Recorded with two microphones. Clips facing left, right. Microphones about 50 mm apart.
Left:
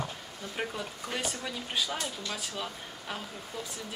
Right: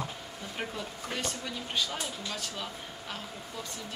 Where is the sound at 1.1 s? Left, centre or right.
Centre.